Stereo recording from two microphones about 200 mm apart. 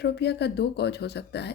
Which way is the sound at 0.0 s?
55° left (ahead or behind).